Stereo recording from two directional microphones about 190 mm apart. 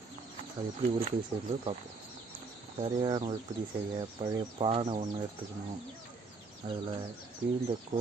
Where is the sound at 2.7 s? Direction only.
25° right (ahead or behind).